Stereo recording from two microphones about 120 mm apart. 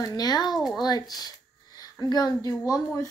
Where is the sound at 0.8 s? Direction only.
35° left (ahead or behind).